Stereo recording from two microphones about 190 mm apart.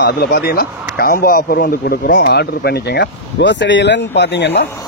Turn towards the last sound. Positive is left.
turn(degrees=65)  # may be behind; listen again after turning